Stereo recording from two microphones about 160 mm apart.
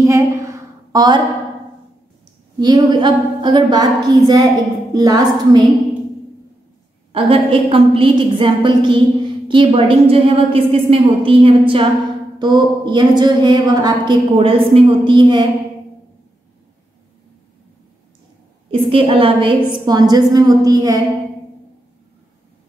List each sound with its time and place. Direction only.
0.0 s a sound: 20° right (ahead or behind)
2.6 s a woman's voice: 25° right (ahead or behind)
7.1 s a woman's voice: 35° right (ahead or behind)
18.7 s a woman's voice: 35° right (ahead or behind)